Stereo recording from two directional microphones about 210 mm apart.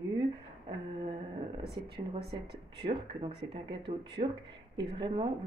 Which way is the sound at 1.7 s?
50° right (ahead or behind).